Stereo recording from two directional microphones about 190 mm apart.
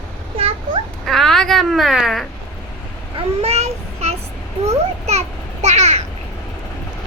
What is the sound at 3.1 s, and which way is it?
Child singing, 35° right (ahead or behind).